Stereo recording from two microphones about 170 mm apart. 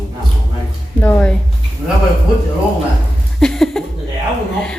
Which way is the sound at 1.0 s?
10° left (ahead or behind).